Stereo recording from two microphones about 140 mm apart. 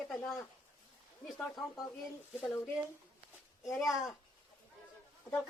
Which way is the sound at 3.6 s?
Centre (ahead or behind).